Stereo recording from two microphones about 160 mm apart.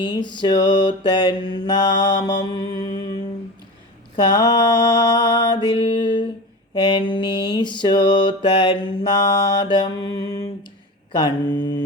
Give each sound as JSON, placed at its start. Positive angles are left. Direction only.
{"t": 0.0, "sound": "mantra", "side_deg": 30}
{"t": 4.2, "sound": "mantra", "side_deg": 25}